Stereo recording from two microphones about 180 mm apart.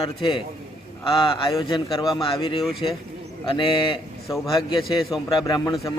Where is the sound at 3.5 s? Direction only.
30° left (ahead or behind).